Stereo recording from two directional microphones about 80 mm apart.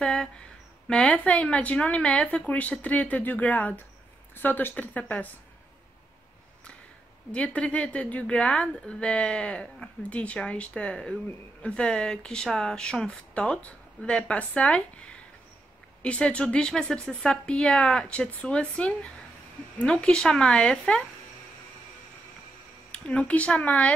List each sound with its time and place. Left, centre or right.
0.0 s a sound: centre
0.8 s a woman's voice: centre
7.3 s a woman's voice: centre
22.8 s a woman's voice: centre